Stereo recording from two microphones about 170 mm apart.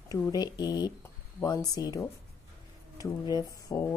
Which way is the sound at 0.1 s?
25° left (ahead or behind).